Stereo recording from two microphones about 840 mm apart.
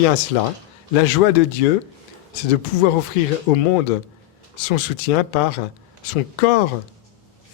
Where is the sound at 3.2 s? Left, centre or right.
Left.